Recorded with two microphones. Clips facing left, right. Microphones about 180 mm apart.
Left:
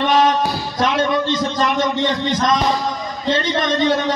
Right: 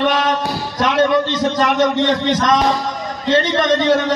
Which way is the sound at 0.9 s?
70° right (ahead or behind).